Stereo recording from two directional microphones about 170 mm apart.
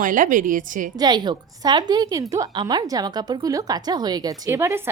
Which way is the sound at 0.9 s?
25° right (ahead or behind).